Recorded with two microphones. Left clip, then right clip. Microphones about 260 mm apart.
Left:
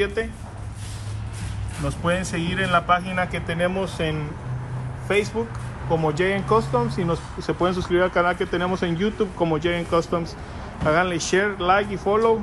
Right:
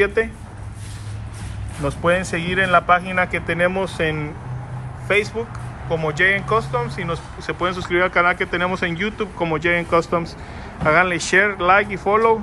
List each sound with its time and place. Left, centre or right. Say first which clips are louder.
0.0 s speech: right 6 dB; centre
1.9 s speech: right 6 dB; centre